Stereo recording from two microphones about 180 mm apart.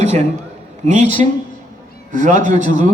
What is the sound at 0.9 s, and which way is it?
Speech, 40° right (ahead or behind).